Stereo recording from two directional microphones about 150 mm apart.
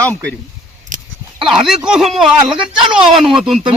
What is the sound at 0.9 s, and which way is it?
Dog, 60° right (ahead or behind).